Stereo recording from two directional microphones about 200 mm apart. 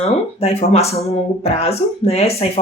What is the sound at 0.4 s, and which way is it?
Speech, 30° left (ahead or behind).